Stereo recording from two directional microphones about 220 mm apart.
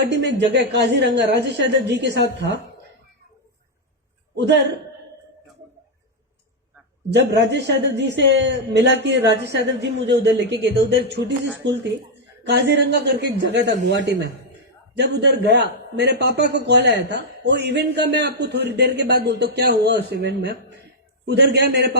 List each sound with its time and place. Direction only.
0.1 s a man's voice: 50° right (ahead or behind)
7.1 s a man's voice: 50° right (ahead or behind)